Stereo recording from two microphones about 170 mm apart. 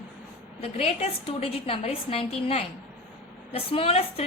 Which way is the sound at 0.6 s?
40° left (ahead or behind).